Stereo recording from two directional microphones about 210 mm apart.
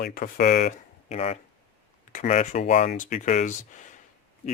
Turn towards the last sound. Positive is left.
turn(degrees=35)  # may be behind; listen again after turning